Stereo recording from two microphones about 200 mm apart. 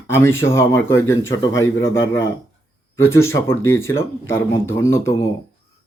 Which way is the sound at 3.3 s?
15° left (ahead or behind).